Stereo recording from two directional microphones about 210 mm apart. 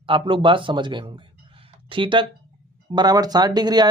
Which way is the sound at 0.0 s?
25° right (ahead or behind).